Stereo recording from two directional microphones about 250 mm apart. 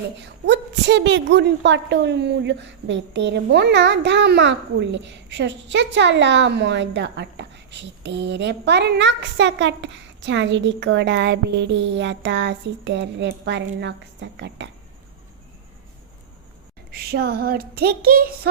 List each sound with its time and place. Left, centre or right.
0.4 s a woman's voice: right
16.9 s speech: right